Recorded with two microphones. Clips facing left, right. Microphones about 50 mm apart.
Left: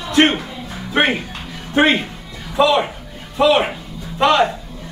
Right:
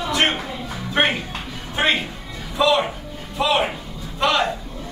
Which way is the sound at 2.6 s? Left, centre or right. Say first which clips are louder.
Left 3 dB; left.